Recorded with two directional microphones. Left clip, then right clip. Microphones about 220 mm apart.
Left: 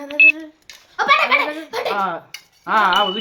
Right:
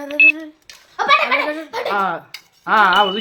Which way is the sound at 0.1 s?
Centre (ahead or behind).